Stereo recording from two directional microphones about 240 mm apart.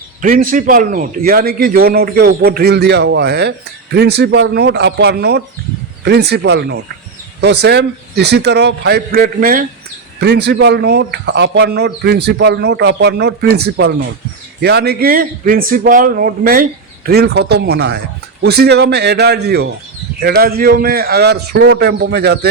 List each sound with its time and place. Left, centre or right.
0.2 s a man's voice: right